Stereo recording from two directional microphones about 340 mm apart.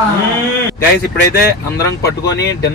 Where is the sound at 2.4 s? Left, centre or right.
Left.